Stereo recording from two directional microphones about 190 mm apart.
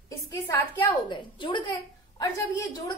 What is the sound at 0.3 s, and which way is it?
A woman's voice, 15° left (ahead or behind).